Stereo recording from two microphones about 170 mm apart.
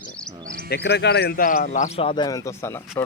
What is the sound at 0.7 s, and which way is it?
Speech, 85° left.